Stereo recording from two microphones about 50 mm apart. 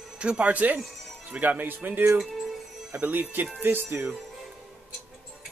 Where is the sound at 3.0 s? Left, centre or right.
Right.